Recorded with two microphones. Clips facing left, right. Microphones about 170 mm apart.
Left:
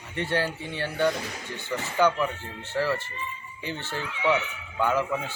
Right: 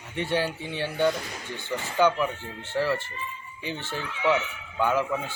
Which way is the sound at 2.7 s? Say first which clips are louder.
Right 1 dB; 15° right (ahead or behind).